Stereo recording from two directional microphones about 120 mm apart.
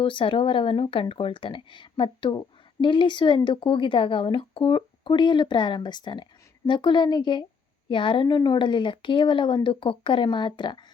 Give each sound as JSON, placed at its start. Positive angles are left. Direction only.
{"t": 0.0, "sound": "a woman's voice", "side_deg": 45}